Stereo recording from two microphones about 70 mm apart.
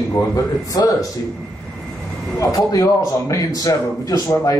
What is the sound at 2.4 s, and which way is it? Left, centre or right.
Speech, left.